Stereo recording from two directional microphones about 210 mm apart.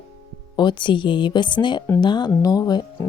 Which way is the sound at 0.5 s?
20° left (ahead or behind).